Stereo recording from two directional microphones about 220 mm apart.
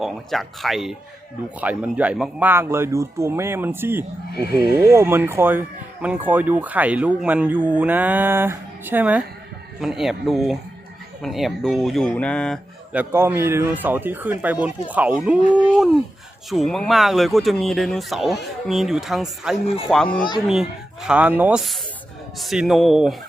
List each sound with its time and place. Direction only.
0.0 s speech: centre (ahead or behind)
4.4 s speech: 45° right (ahead or behind)
4.8 s speech: 10° right (ahead or behind)